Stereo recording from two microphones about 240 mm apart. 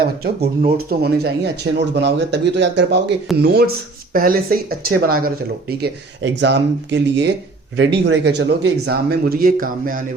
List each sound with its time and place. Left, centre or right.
0.6 s speech: right